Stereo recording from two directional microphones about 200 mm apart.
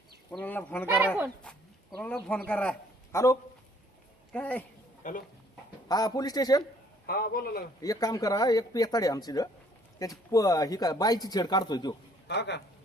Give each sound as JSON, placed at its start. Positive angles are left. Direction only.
{"t": 0.3, "sound": "speech", "side_deg": 10}
{"t": 0.9, "sound": "speech", "side_deg": -10}
{"t": 2.0, "sound": "speech", "side_deg": 5}
{"t": 5.0, "sound": "speech", "side_deg": 40}
{"t": 5.9, "sound": "speech", "side_deg": 20}
{"t": 7.1, "sound": "a man's voice", "side_deg": 50}
{"t": 7.8, "sound": "speech", "side_deg": 20}
{"t": 12.3, "sound": "a man's voice", "side_deg": 60}